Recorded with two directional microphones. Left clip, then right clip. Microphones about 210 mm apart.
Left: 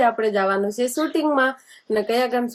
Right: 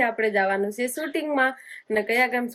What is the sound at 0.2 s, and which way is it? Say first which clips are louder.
Speech: left 2 dB; 15° left (ahead or behind).